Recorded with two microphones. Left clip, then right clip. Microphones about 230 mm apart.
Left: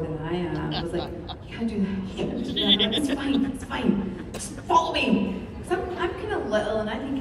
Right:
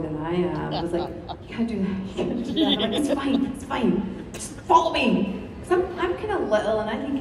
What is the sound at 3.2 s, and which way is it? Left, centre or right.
A woman's voice, right.